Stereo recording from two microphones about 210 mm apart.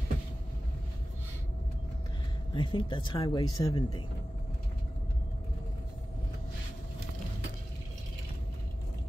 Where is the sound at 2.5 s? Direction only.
20° left (ahead or behind).